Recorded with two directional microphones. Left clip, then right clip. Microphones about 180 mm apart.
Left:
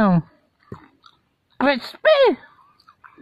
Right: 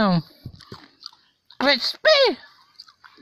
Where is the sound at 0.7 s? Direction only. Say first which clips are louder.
Right 1 dB; 30° right (ahead or behind).